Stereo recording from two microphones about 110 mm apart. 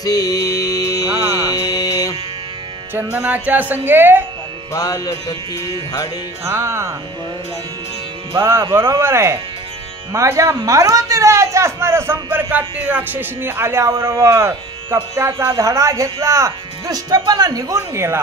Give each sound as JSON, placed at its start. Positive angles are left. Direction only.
{"t": 0.0, "sound": "music", "side_deg": 35}
{"t": 2.9, "sound": "speech", "side_deg": -20}
{"t": 4.7, "sound": "music", "side_deg": 35}
{"t": 6.4, "sound": "a man's voice", "side_deg": -25}
{"t": 8.4, "sound": "a man's voice", "side_deg": -25}